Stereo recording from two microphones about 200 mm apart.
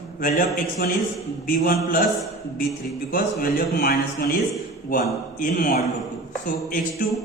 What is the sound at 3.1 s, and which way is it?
A man's voice, 45° left (ahead or behind).